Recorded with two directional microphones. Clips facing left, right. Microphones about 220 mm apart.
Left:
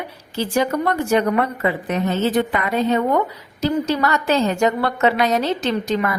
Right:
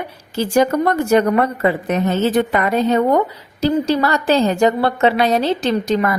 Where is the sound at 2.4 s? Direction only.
45° right (ahead or behind).